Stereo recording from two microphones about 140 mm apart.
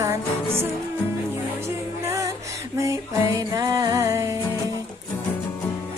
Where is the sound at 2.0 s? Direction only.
20° right (ahead or behind).